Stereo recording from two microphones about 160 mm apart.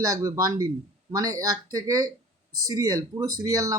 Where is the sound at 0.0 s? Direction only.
20° right (ahead or behind).